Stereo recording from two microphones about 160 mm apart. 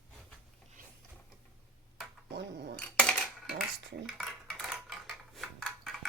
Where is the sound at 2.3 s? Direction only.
90° right.